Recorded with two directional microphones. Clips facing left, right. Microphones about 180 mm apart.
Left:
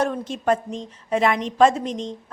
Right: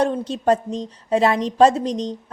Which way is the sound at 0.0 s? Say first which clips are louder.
Right 3 dB; 30° right (ahead or behind).